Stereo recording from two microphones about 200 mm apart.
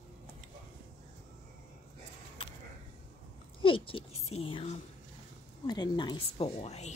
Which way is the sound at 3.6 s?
25° left (ahead or behind).